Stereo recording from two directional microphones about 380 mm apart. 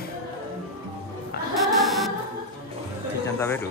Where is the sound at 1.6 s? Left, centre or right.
Centre.